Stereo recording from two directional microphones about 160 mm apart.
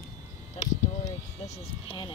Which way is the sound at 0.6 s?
45° left (ahead or behind).